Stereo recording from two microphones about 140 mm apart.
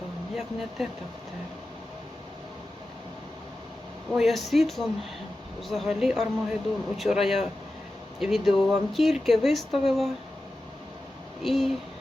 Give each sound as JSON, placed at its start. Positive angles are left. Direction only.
{"t": 4.1, "sound": "speech", "side_deg": 0}
{"t": 11.4, "sound": "speech", "side_deg": 0}